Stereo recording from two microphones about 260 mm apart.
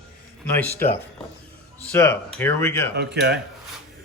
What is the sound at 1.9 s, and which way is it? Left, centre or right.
Speech, centre.